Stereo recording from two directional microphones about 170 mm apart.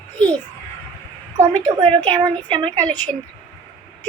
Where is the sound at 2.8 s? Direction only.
10° left (ahead or behind).